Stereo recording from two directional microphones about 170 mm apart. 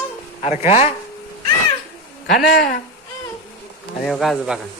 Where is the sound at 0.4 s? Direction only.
40° left (ahead or behind).